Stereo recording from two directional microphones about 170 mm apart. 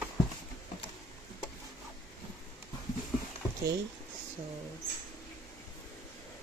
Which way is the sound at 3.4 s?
10° right (ahead or behind).